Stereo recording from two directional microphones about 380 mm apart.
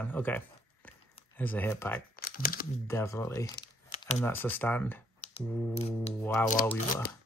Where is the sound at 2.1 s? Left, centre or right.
Left.